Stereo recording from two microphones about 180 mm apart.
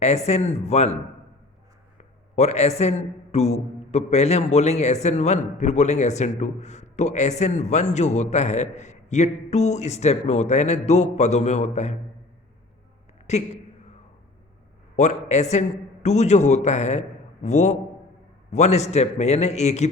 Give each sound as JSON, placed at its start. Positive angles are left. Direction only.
{"t": 0.0, "sound": "a man's voice", "side_deg": 40}
{"t": 2.0, "sound": "a sound", "side_deg": 40}
{"t": 3.3, "sound": "a man's voice", "side_deg": 35}
{"t": 13.3, "sound": "a man's voice", "side_deg": 40}
{"t": 14.9, "sound": "a man's voice", "side_deg": 40}